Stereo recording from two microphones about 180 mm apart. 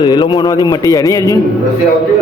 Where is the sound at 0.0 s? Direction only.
20° left (ahead or behind).